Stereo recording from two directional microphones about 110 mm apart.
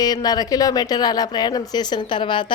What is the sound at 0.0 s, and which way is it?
Speech, 35° left (ahead or behind).